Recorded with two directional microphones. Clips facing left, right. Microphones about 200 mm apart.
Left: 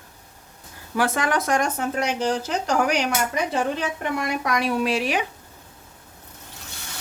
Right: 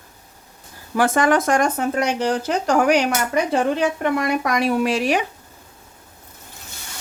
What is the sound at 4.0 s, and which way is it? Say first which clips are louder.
Speech: right 5 dB; 55° right (ahead or behind).